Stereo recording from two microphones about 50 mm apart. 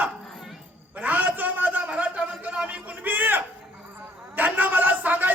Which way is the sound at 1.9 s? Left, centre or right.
Right.